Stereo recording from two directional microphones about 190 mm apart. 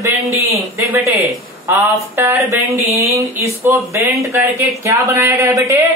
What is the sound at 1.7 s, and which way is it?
Speech, 15° right (ahead or behind).